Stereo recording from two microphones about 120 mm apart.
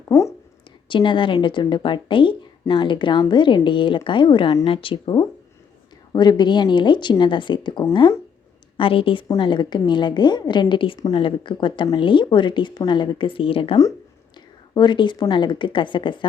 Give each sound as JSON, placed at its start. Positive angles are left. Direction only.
{"t": 0.1, "sound": "a sound", "side_deg": 25}
{"t": 0.9, "sound": "speech", "side_deg": 45}
{"t": 14.7, "sound": "speech", "side_deg": 40}